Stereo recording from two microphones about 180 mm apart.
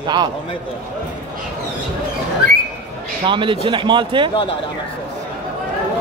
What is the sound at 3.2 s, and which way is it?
Speech, 25° right (ahead or behind).